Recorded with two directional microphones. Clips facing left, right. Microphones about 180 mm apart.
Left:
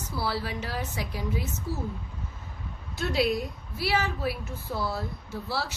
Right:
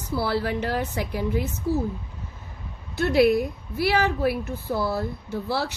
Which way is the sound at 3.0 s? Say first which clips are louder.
Right 8 dB; 60° right (ahead or behind).